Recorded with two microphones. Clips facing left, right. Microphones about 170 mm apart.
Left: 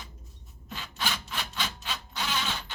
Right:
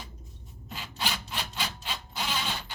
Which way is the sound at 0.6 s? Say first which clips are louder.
Even; 15° right (ahead or behind).